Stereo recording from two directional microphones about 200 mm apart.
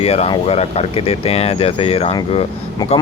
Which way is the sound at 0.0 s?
30° left (ahead or behind).